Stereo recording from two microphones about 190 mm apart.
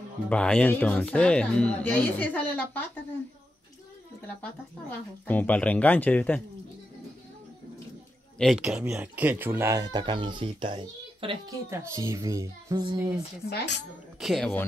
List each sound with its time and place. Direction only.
0.3 s speech: 5° left (ahead or behind)
4.4 s speech: 10° left (ahead or behind)
8.4 s speech: centre (ahead or behind); by 11.3 s 30° right (ahead or behind)
11.7 s speech: 15° right (ahead or behind)
13.5 s speech: 60° left (ahead or behind)
14.2 s speech: centre (ahead or behind)